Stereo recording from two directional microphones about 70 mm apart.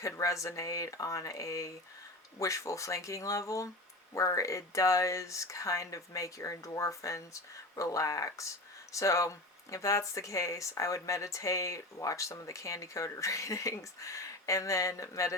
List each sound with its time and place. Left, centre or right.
0.0 s speech: left